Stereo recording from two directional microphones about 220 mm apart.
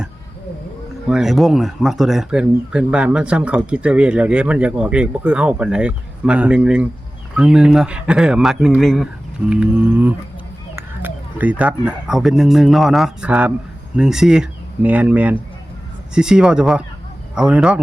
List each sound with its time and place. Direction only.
1.0 s speech: 5° right (ahead or behind)
9.5 s a sound: 5° right (ahead or behind)
10.8 s speech: 10° right (ahead or behind)